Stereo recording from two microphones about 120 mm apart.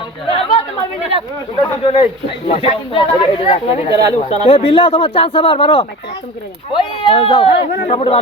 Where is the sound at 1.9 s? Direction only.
50° left (ahead or behind).